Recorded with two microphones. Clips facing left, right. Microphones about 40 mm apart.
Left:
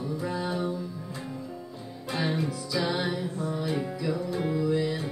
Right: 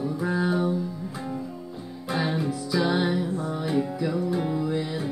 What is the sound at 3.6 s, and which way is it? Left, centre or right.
Music, centre.